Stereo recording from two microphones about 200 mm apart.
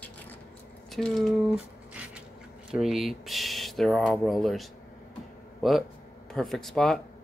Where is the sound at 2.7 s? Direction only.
Centre (ahead or behind).